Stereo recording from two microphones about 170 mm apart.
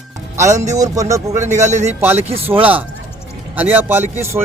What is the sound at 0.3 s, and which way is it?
Speech, 15° right (ahead or behind).